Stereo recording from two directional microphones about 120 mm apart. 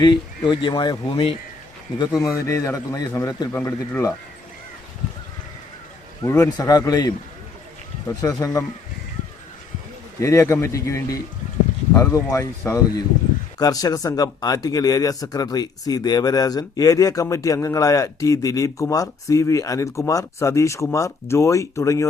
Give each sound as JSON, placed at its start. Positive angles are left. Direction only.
{"t": 0.0, "sound": "speech", "side_deg": 40}
{"t": 2.0, "sound": "speech", "side_deg": 25}
{"t": 6.2, "sound": "speech", "side_deg": 25}
{"t": 8.2, "sound": "speech", "side_deg": 30}
{"t": 10.2, "sound": "speech", "side_deg": 25}